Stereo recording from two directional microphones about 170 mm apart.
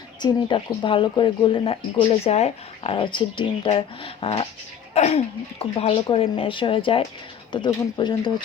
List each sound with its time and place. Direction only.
0.2 s speech: 25° left (ahead or behind)